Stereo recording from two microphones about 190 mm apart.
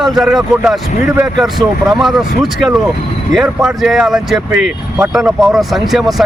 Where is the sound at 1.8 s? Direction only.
Centre (ahead or behind).